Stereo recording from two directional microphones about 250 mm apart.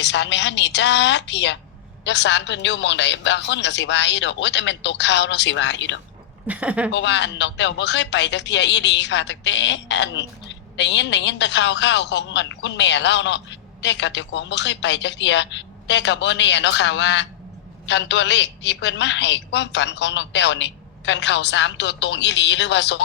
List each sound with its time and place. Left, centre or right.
0.0 s speech: left
6.5 s a woman's voice: centre
6.9 s speech: left